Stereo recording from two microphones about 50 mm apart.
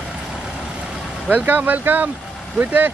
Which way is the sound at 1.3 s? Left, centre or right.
Right.